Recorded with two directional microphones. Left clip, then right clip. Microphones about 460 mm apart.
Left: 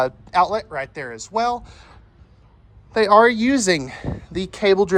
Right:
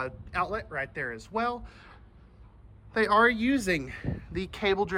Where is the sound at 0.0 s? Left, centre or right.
Centre.